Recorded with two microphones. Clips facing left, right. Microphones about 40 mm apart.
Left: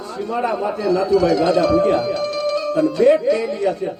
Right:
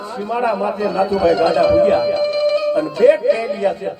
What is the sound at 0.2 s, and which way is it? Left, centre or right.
Speech, centre.